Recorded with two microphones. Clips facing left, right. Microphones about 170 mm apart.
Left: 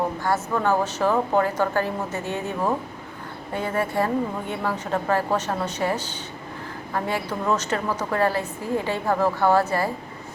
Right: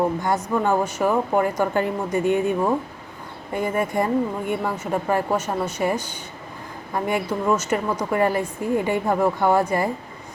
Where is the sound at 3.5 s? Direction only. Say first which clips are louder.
Right 2 dB; 15° right (ahead or behind).